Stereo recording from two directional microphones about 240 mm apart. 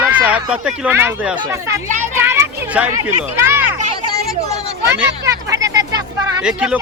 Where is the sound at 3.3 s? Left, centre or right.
Centre.